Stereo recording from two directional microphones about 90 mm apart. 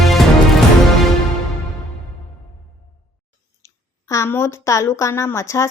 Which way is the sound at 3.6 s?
35° left (ahead or behind).